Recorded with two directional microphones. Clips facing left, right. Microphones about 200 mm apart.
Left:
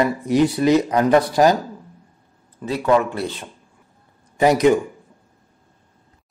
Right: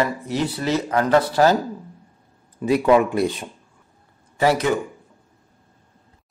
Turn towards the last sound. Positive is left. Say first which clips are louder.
# left 4 dB
turn(degrees=20)  # may be behind; listen again after turning